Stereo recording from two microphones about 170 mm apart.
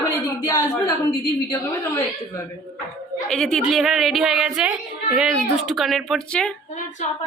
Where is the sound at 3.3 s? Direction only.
Centre (ahead or behind).